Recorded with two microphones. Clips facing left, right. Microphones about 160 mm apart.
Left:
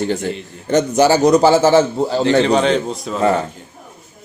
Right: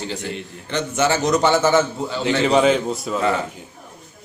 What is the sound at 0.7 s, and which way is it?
A man's voice, 40° left (ahead or behind).